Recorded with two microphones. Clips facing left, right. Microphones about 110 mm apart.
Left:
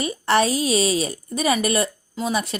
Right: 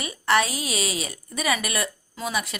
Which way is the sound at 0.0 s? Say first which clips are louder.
Left 3 dB; 30° left (ahead or behind).